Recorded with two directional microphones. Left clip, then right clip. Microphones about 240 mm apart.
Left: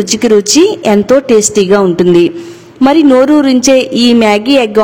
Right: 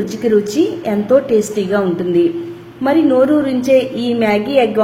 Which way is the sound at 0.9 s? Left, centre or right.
Left.